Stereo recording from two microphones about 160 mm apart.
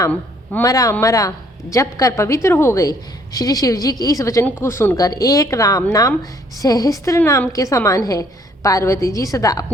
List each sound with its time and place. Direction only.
0.6 s a woman's voice: 20° left (ahead or behind)